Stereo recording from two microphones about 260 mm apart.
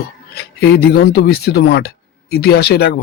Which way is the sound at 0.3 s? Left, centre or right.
Left.